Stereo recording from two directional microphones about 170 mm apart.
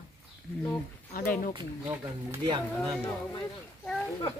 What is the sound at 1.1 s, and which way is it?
Speech, 55° left (ahead or behind).